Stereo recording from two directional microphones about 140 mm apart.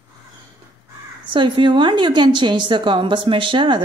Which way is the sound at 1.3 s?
35° right (ahead or behind).